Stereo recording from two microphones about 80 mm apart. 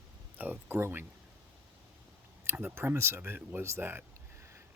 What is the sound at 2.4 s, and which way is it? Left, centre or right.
Speech, right.